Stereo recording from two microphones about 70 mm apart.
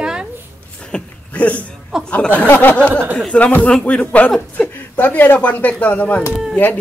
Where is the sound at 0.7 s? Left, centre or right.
Centre.